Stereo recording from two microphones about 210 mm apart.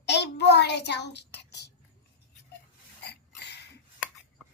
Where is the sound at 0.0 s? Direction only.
55° left (ahead or behind).